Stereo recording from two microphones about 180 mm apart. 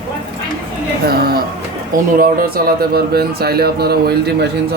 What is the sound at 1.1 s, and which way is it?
Speech, 60° right (ahead or behind).